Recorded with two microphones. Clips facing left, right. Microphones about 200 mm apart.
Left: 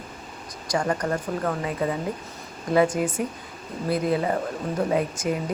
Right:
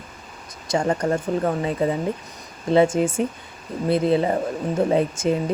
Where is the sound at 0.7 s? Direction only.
25° right (ahead or behind).